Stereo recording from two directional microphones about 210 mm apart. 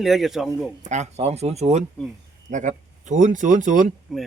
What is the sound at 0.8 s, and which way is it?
Speech, 35° right (ahead or behind).